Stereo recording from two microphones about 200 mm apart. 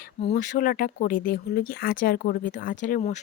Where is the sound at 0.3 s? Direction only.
45° left (ahead or behind).